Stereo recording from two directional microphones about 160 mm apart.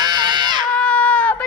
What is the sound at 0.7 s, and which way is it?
Baby cry, 5° left (ahead or behind).